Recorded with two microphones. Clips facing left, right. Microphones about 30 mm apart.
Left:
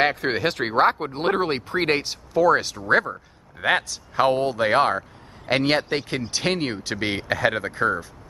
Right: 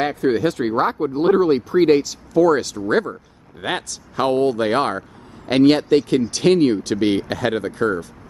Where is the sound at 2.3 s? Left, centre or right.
Centre.